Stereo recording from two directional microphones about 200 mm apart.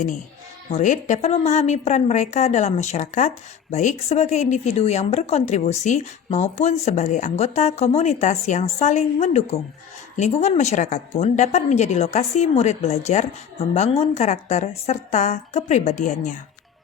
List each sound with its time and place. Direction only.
0.7 s a woman's voice: 35° left (ahead or behind)